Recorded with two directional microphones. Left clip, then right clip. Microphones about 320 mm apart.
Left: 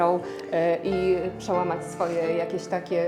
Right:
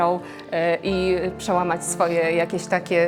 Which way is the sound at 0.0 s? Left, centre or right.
Right.